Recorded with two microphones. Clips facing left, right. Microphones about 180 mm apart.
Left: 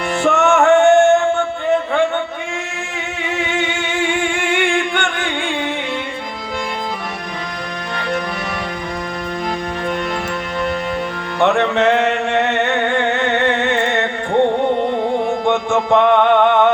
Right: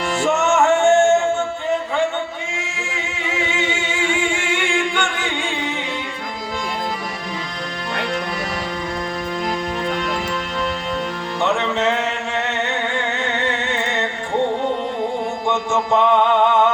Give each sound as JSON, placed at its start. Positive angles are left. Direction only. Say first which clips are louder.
{"t": 0.2, "sound": "music", "louder": "left 3 dB", "side_deg": 60}
{"t": 2.9, "sound": "singing", "louder": "left 3 dB", "side_deg": 60}
{"t": 11.3, "sound": "music", "louder": "left 6 dB", "side_deg": 60}
{"t": 15.4, "sound": "music", "louder": "left 2 dB", "side_deg": 60}